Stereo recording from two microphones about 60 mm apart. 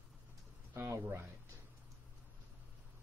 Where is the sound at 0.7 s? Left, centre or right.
Right.